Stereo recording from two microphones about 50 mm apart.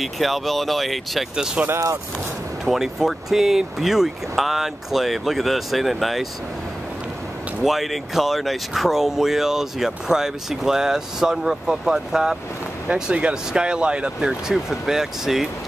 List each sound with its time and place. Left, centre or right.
0.0 s speech: centre
1.3 s speech: centre
2.6 s speech: centre
7.6 s speech: centre
12.8 s speech: right
14.5 s speech: centre